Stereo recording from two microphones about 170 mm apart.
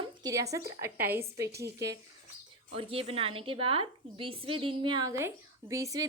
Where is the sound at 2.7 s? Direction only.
35° right (ahead or behind).